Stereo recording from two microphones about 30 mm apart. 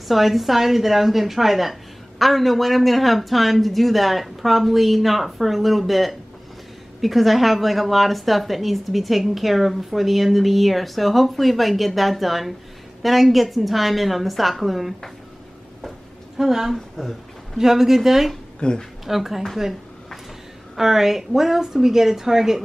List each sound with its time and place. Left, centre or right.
0.1 s a woman's voice: centre
16.3 s a woman's voice: centre
16.7 s a woman's voice: centre
17.6 s a woman's voice: centre
18.6 s speech: left
19.0 s a woman's voice: centre
20.7 s a woman's voice: centre